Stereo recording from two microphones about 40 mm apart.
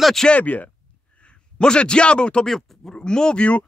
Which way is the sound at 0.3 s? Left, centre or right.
Left.